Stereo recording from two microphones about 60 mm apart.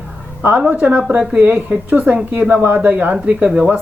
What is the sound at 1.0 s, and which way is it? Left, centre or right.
Speech, centre.